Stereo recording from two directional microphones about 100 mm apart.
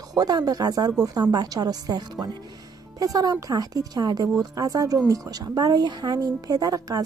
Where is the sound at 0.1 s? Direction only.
40° right (ahead or behind).